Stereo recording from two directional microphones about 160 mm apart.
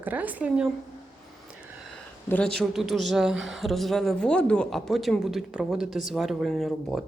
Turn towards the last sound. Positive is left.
turn(degrees=0)  # may be behind; listen again after turning